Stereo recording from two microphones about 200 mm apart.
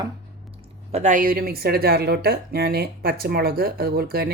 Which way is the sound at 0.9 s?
35° right (ahead or behind).